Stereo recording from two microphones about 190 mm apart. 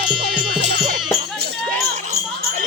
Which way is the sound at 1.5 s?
45° right (ahead or behind).